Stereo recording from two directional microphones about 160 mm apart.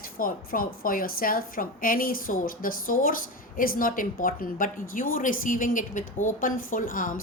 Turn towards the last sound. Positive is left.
turn(degrees=60)  # may be behind; listen again after turning